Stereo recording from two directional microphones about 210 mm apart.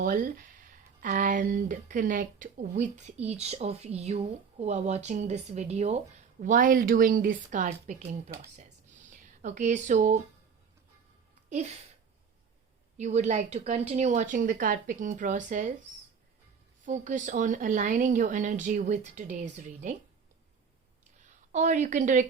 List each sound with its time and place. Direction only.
0.0 s speech: 40° right (ahead or behind)
8.5 s a sound: 35° right (ahead or behind)
11.4 s a sound: 35° right (ahead or behind)
13.0 s speech: 35° right (ahead or behind)
16.8 s speech: 35° right (ahead or behind)
21.2 s a woman's voice: 35° right (ahead or behind)